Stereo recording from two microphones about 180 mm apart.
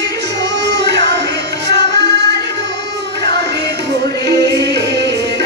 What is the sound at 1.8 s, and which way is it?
Music, 70° right (ahead or behind).